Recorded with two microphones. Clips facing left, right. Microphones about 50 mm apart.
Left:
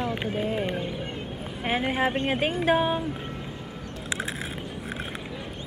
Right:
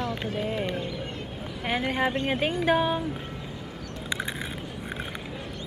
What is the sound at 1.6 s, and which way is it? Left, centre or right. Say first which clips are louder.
Speech: left 1 dB; centre.